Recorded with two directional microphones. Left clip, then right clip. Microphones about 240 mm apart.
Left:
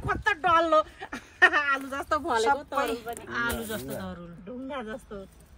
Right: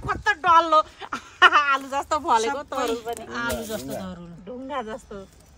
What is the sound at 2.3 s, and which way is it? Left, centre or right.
Speech, centre.